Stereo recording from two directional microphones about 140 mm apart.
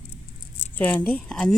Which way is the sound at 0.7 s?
10° left (ahead or behind).